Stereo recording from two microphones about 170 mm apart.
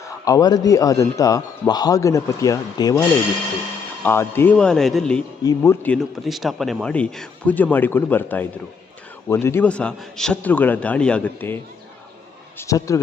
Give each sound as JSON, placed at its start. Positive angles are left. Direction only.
{"t": 0.0, "sound": "a man's voice", "side_deg": 20}
{"t": 4.0, "sound": "speech", "side_deg": 15}
{"t": 5.4, "sound": "a man's voice", "side_deg": 20}
{"t": 5.8, "sound": "a man's voice", "side_deg": 5}